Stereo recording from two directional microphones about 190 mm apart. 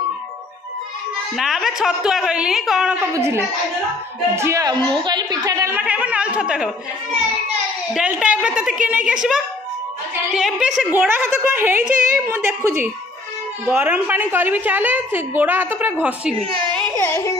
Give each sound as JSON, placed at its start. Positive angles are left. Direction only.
{"t": 1.3, "sound": "a man's voice", "side_deg": 0}
{"t": 7.9, "sound": "a man's voice", "side_deg": -5}
{"t": 11.9, "sound": "a woman's voice", "side_deg": -45}
{"t": 12.3, "sound": "a woman's voice", "side_deg": -10}
{"t": 16.9, "sound": "yodeling", "side_deg": 15}